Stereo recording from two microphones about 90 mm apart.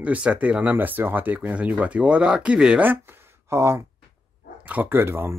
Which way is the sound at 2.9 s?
25° right (ahead or behind).